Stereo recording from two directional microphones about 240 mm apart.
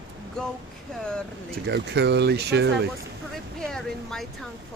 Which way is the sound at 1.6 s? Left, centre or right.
Right.